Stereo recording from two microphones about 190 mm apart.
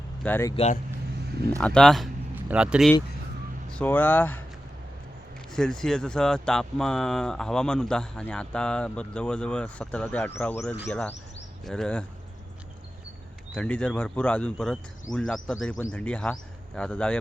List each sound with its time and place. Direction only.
0.2 s speech: 10° left (ahead or behind)
0.5 s speech: 35° left (ahead or behind)
1.6 s speech: 5° left (ahead or behind)
3.7 s speech: 5° left (ahead or behind)
5.5 s speech: 5° left (ahead or behind)
13.5 s speech: 5° left (ahead or behind)